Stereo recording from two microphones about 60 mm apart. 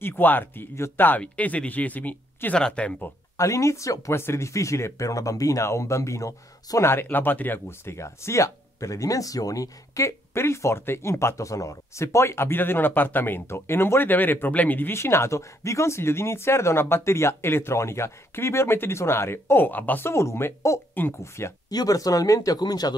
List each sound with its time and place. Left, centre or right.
0.0 s speech: left
1.2 s speech: left
2.5 s speech: centre
3.3 s speech: left
4.1 s speech: left
5.7 s speech: left
6.8 s speech: left
7.9 s speech: left
15.0 s speech: left
21.6 s speech: left